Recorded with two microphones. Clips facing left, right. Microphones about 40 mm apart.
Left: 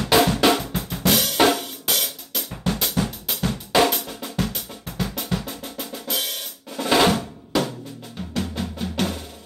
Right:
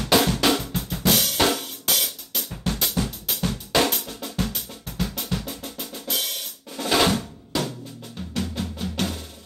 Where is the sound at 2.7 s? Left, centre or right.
Centre.